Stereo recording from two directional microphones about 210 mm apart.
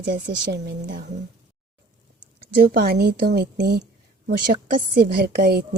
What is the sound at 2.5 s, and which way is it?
A woman's voice, 45° right (ahead or behind).